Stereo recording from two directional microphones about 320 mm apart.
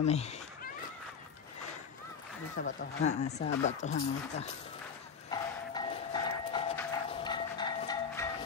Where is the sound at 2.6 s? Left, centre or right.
Left.